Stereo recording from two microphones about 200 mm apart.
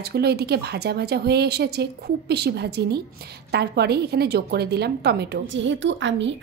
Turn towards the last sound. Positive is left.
turn(degrees=-65)  # may be behind; listen again after turning